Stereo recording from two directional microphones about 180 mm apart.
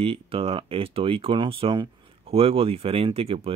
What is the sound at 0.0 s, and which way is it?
Speech, 30° right (ahead or behind).